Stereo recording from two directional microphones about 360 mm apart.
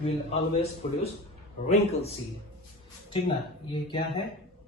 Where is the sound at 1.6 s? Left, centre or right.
Centre.